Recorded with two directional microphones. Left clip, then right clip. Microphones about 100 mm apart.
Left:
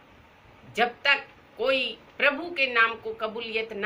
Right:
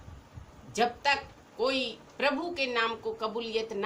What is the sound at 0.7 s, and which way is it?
A woman's voice, 20° right (ahead or behind).